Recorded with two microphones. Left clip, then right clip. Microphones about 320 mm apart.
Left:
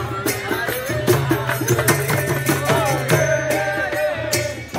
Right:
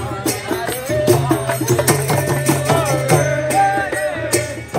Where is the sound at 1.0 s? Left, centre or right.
Centre.